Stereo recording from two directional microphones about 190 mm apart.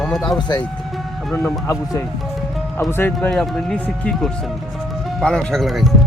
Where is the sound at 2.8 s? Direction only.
10° left (ahead or behind).